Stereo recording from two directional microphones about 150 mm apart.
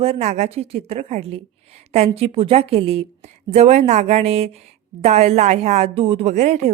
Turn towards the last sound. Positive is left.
turn(degrees=-50)  # may be behind; listen again after turning